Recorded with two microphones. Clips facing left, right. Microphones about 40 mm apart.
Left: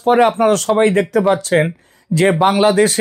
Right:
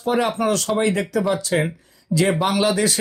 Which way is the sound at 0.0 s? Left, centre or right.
Left.